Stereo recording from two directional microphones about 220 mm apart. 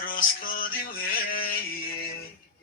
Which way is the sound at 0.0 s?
40° left (ahead or behind).